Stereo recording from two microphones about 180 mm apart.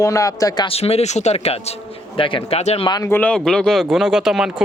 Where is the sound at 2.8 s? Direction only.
25° left (ahead or behind).